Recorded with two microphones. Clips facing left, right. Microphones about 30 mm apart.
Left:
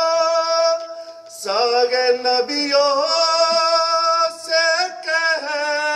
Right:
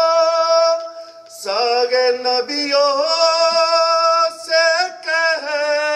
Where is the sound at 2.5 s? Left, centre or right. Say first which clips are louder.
Right 1 dB; right.